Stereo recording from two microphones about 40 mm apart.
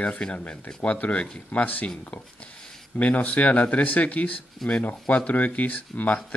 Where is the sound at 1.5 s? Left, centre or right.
Left.